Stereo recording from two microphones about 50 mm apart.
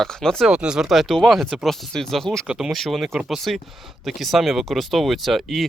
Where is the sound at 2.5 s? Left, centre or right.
Centre.